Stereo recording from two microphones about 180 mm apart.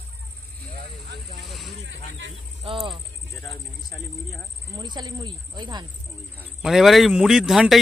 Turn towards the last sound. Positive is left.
turn(degrees=0)  # may be behind; listen again after turning